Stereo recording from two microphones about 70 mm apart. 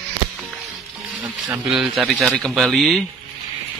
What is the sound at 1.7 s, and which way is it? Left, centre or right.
Speech, centre.